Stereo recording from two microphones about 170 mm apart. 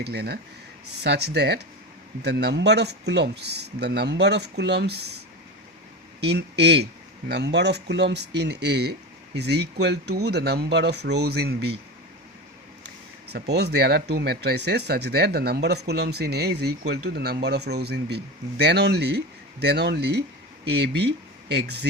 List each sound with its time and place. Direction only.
0.0 s speech: 75° right (ahead or behind)
6.1 s speech: 80° right
13.3 s speech: 75° right (ahead or behind)